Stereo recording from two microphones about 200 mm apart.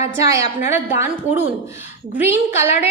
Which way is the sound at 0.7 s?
10° right (ahead or behind).